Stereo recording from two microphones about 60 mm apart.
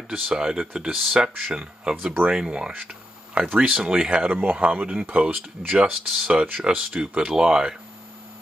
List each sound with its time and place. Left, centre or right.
0.3 s speech: centre
4.3 s speech: right
6.0 s speech: centre
6.3 s speech: right